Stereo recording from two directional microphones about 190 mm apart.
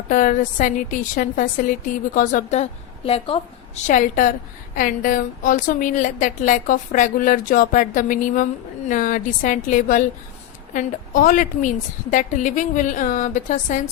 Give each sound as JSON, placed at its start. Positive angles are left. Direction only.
{"t": 0.1, "sound": "a woman's voice", "side_deg": 45}
{"t": 3.8, "sound": "a woman's voice", "side_deg": 45}